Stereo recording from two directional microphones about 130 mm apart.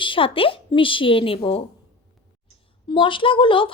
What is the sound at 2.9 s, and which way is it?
Speech, 40° left (ahead or behind).